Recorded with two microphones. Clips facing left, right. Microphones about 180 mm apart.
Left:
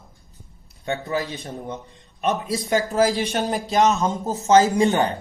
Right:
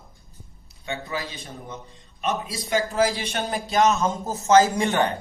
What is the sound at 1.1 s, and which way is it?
Speech, 60° left (ahead or behind).